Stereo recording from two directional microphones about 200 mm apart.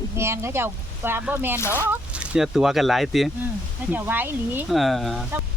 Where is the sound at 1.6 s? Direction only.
10° left (ahead or behind).